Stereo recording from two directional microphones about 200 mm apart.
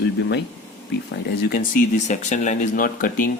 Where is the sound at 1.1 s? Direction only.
50° left (ahead or behind).